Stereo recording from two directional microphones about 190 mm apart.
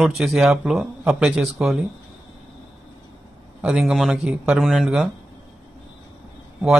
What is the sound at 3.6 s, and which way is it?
A man's voice, 5° right (ahead or behind).